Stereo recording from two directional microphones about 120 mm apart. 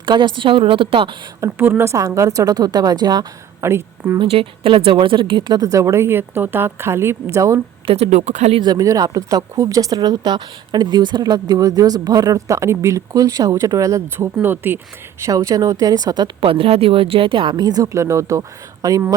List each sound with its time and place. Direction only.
0.0 s a woman's voice: 40° right (ahead or behind)
1.4 s a woman's voice: 20° right (ahead or behind)
3.6 s speech: 20° right (ahead or behind)
4.2 s a woman's voice: 50° right (ahead or behind); by 7.6 s 25° right (ahead or behind)
7.9 s speech: 55° right (ahead or behind); by 8.5 s 85° right
8.5 s a woman's voice: 35° right (ahead or behind)